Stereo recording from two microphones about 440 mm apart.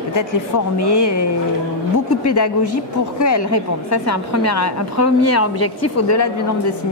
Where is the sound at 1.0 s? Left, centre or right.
Left.